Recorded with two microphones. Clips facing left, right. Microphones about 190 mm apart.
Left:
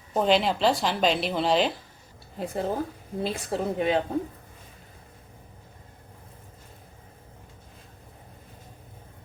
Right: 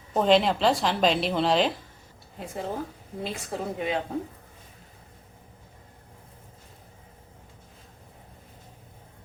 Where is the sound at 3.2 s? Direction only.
30° left (ahead or behind).